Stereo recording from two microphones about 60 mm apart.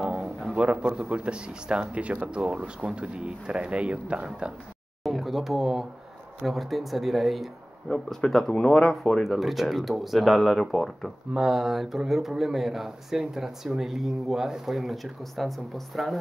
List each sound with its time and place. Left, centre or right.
0.1 s speech: centre
5.0 s speech: centre